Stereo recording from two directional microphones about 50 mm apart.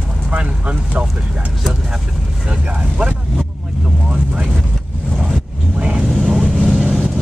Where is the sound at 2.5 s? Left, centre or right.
Right.